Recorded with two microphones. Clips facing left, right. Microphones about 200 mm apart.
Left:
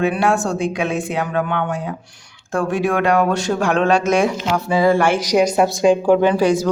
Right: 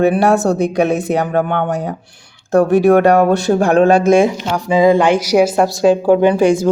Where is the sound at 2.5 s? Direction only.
40° right (ahead or behind).